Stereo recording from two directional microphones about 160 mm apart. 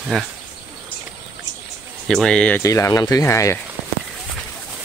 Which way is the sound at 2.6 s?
20° left (ahead or behind).